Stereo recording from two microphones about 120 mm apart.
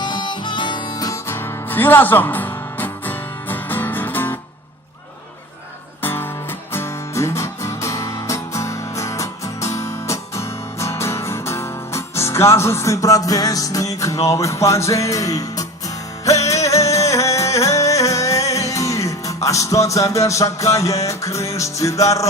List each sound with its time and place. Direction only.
0.0 s music: 40° left (ahead or behind); by 4.4 s 15° left (ahead or behind)
6.0 s music: 15° left (ahead or behind)